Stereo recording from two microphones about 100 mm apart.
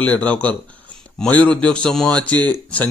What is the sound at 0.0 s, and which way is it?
A man's voice, 15° left (ahead or behind).